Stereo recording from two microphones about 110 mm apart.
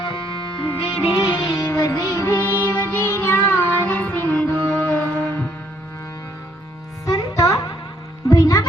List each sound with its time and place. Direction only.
0.0 s music: 50° left (ahead or behind)
1.1 s music: 35° left (ahead or behind); by 5.5 s 15° left (ahead or behind)
7.0 s music: 30° left (ahead or behind)